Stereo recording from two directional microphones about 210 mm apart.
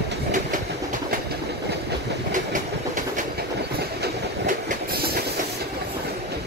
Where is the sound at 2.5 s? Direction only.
40° right (ahead or behind).